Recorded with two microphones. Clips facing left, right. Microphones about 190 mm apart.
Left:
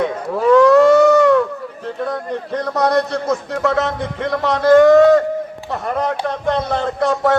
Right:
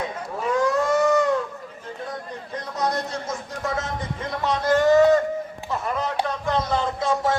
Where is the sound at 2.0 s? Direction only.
70° left (ahead or behind).